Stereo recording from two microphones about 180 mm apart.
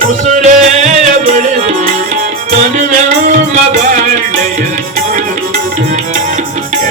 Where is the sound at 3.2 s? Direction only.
45° right (ahead or behind).